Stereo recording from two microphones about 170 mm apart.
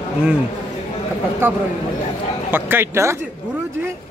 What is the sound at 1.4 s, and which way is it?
Speech, 15° right (ahead or behind).